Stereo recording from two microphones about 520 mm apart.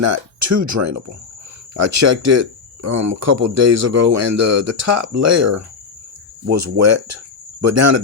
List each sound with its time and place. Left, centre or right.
0.0 s speech: right